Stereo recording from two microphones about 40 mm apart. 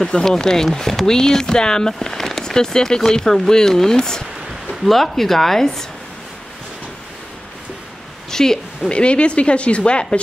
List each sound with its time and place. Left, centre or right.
0.0 s speech: centre
8.3 s a sound: centre
8.9 s speech: left